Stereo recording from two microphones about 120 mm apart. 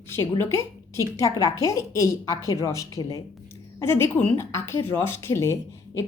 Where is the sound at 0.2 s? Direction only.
25° left (ahead or behind).